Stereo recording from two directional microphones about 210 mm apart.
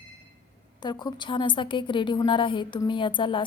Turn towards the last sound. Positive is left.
turn(degrees=25)  # may be behind; listen again after turning